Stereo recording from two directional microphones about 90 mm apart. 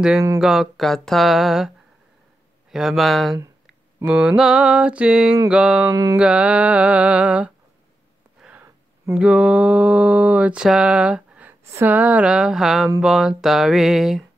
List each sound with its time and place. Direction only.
0.4 s a sound: 5° right (ahead or behind)
2.7 s a sound: 5° right (ahead or behind)
5.5 s mantra: 10° right (ahead or behind)
5.9 s music: 40° right (ahead or behind)
6.1 s mantra: 10° right (ahead or behind)
9.1 s mantra: 10° right (ahead or behind)
11.6 s speech: 30° right (ahead or behind)
11.9 s mantra: 15° right (ahead or behind)
13.0 s a sound: 5° right (ahead or behind)